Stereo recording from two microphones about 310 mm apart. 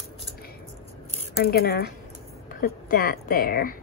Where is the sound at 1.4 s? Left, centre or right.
Left.